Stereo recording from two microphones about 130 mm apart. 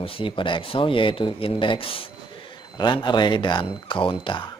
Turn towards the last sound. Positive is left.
turn(degrees=40)  # may be behind; listen again after turning